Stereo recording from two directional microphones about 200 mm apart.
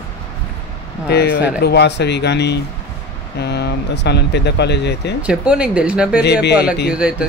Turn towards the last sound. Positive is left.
turn(degrees=-5)  # may be behind; listen again after turning